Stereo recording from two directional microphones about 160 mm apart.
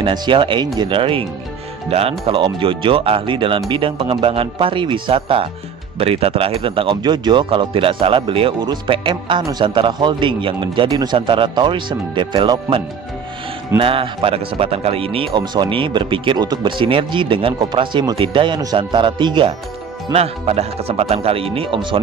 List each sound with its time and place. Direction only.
0.0 s speech: 30° right (ahead or behind)
20.1 s speech: 40° right (ahead or behind)